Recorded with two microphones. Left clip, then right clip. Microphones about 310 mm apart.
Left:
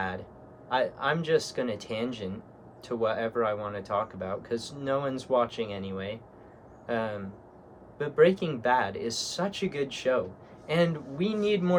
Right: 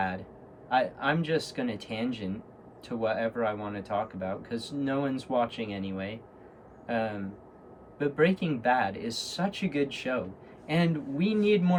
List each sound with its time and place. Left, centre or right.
0.7 s a man's voice: centre